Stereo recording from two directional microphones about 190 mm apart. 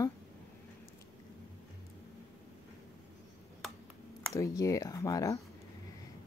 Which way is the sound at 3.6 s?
Centre (ahead or behind).